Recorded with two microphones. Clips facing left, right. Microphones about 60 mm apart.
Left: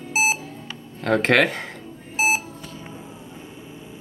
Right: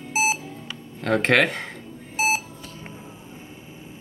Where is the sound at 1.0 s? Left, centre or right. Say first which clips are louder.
Left 1 dB; centre.